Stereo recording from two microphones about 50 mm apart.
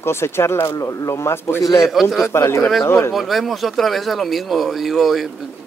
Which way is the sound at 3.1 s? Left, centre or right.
Centre.